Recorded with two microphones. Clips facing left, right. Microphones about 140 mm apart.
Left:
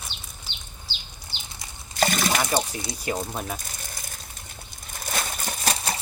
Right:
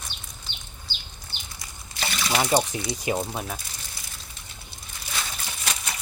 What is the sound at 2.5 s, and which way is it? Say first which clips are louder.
Speech: right 3 dB; 20° right (ahead or behind).